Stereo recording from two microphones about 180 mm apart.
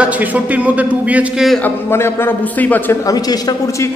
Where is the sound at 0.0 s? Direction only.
10° right (ahead or behind).